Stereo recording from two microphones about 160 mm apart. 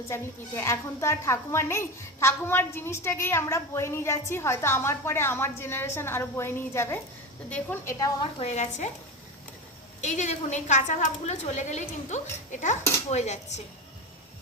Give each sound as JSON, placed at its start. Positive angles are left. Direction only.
{"t": 0.1, "sound": "a woman's voice", "side_deg": 15}
{"t": 7.9, "sound": "a woman's voice", "side_deg": 25}
{"t": 8.4, "sound": "a woman's voice", "side_deg": 45}
{"t": 10.0, "sound": "a woman's voice", "side_deg": 45}